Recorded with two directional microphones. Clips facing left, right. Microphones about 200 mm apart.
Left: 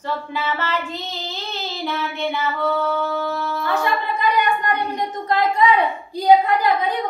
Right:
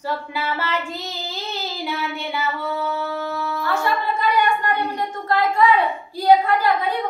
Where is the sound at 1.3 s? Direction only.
10° right (ahead or behind).